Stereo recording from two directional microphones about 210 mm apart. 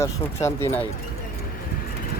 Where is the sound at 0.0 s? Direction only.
15° left (ahead or behind).